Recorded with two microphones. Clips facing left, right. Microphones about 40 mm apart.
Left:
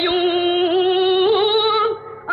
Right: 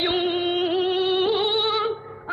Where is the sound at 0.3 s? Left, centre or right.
Left.